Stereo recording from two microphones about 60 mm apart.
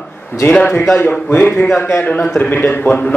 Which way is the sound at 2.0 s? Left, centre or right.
Left.